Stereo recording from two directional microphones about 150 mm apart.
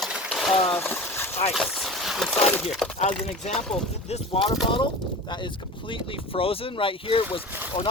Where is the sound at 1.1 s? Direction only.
15° left (ahead or behind).